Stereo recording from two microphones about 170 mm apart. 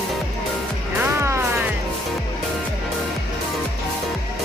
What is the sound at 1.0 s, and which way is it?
Music, 15° right (ahead or behind).